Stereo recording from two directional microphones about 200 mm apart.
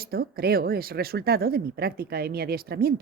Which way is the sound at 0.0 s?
50° right (ahead or behind).